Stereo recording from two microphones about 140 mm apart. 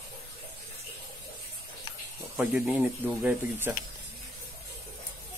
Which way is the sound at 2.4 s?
10° right (ahead or behind).